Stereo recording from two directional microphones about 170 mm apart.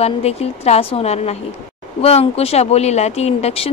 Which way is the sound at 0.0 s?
35° left (ahead or behind).